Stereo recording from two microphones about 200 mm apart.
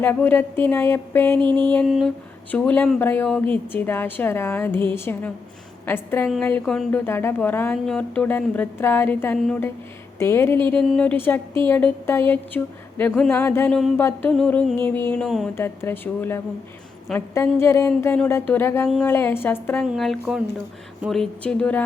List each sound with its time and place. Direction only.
0.0 s speech: 10° left (ahead or behind)
1.4 s a sound: 25° right (ahead or behind)
1.7 s speech: centre (ahead or behind)